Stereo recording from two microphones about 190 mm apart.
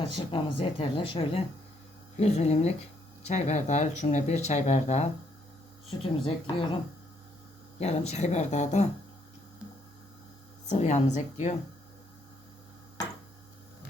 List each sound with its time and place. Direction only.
0.3 s speech: 25° left (ahead or behind)
7.8 s speech: 35° left (ahead or behind)
10.7 s speech: 35° left (ahead or behind)